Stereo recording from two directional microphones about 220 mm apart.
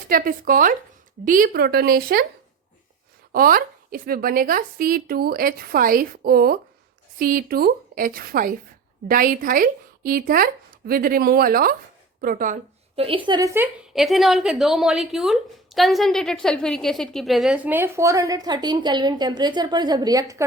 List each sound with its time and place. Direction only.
0.1 s speech: 40° right (ahead or behind)
3.3 s speech: 40° right (ahead or behind)
13.0 s a woman's voice: 25° right (ahead or behind)